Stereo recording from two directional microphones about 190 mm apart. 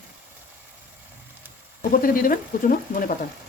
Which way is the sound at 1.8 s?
50° left (ahead or behind).